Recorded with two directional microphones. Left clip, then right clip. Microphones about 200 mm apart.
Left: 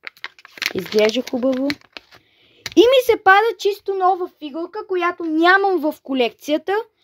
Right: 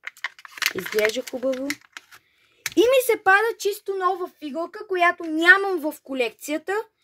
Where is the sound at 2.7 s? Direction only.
30° left (ahead or behind).